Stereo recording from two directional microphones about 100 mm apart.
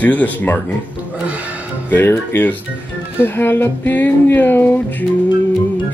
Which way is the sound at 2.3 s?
20° left (ahead or behind).